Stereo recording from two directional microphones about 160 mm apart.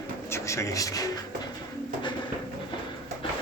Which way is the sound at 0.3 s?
20° left (ahead or behind).